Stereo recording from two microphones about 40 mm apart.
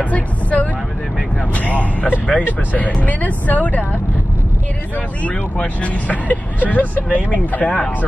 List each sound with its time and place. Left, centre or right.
0.0 s speech: left
5.6 s speech: left